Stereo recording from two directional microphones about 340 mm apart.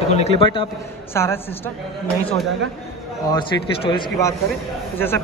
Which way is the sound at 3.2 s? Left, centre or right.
Centre.